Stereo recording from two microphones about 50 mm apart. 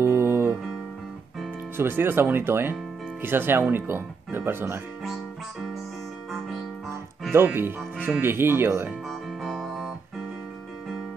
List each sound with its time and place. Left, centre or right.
0.0 s music: right
1.8 s speech: right
2.7 s music: right
3.7 s speech: right
7.5 s speech: right
9.4 s music: centre